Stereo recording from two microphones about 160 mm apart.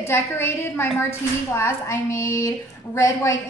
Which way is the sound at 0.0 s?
15° left (ahead or behind).